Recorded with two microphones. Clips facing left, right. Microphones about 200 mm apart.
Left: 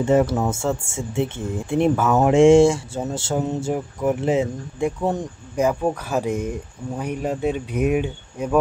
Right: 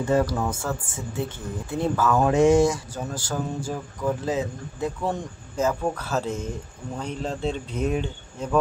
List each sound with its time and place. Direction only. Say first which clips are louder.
0.0 s speech: left 4 dB; 25° left (ahead or behind)
5.6 s speech: left 4 dB; 15° left (ahead or behind)